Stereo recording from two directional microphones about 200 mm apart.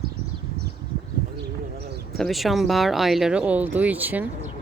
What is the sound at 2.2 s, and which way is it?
Speech, centre (ahead or behind).